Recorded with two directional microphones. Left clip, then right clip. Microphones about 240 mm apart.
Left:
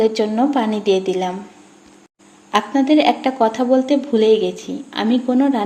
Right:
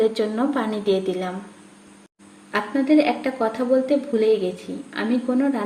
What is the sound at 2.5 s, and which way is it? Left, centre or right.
A woman's voice, left.